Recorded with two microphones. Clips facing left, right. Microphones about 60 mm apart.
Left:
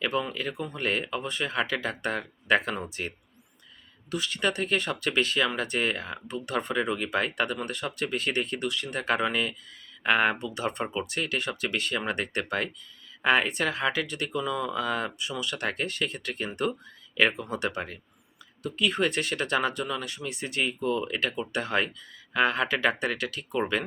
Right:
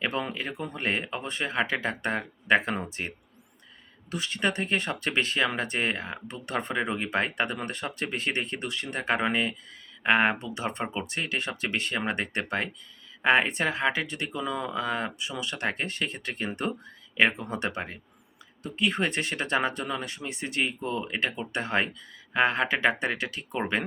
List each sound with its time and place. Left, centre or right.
0.0 s speech: right
4.1 s speech: right